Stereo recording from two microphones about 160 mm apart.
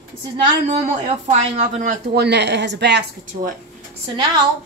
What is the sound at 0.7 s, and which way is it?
Speech, 40° right (ahead or behind).